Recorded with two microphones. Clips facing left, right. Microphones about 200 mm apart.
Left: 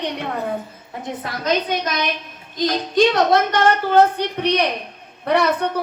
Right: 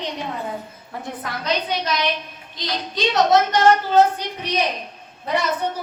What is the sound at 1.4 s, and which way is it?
A woman's voice, 50° left (ahead or behind).